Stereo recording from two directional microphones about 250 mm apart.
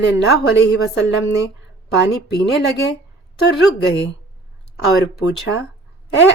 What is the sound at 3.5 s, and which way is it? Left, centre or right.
Speech, left.